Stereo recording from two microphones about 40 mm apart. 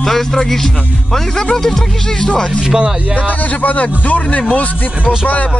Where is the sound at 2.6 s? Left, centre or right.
Centre.